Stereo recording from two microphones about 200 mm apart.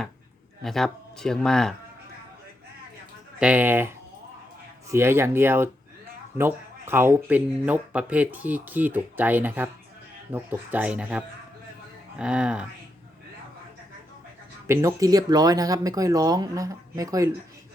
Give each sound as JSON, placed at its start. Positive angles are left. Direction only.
{"t": 0.6, "sound": "speech", "side_deg": 0}
{"t": 3.4, "sound": "speech", "side_deg": -10}
{"t": 14.7, "sound": "speech", "side_deg": -15}